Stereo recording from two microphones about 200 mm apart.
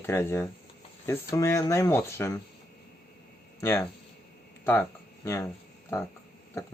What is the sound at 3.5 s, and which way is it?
Speech, 15° left (ahead or behind).